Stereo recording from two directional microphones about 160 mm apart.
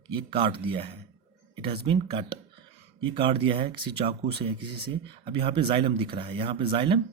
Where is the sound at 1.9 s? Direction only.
35° right (ahead or behind).